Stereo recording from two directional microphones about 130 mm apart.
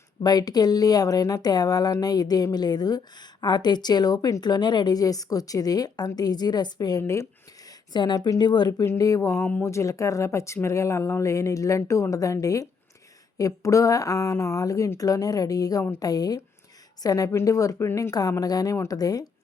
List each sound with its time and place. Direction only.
0.2 s a woman's voice: 30° left (ahead or behind)
7.9 s a woman's voice: 35° left (ahead or behind)